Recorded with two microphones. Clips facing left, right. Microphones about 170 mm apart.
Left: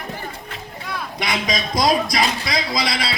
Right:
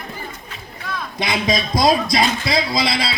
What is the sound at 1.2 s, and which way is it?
A man's voice, 25° right (ahead or behind).